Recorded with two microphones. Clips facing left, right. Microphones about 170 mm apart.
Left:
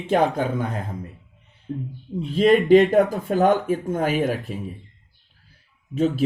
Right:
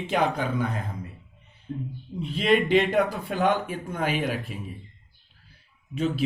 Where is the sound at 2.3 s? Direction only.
45° left (ahead or behind).